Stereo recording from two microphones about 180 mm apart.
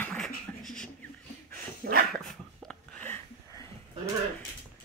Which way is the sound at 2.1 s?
Centre (ahead or behind).